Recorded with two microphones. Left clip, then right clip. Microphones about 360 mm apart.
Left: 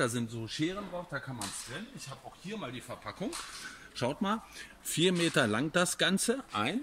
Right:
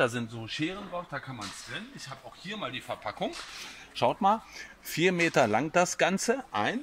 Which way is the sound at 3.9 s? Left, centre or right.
Centre.